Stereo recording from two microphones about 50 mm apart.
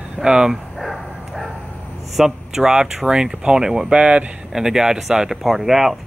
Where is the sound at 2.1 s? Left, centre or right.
Centre.